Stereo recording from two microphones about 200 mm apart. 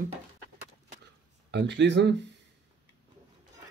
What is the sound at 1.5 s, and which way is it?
Speech, 60° right (ahead or behind).